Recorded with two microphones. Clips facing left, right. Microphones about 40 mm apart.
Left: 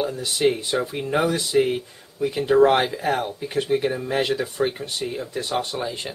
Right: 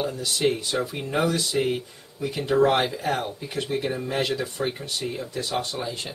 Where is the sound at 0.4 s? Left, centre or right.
Centre.